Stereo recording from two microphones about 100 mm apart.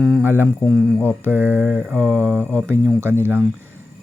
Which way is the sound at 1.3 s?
20° right (ahead or behind).